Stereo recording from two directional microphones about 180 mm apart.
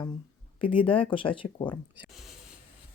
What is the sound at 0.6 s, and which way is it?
Speech, 30° left (ahead or behind).